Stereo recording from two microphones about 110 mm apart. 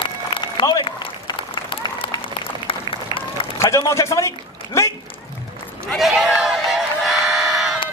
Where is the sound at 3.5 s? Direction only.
25° left (ahead or behind).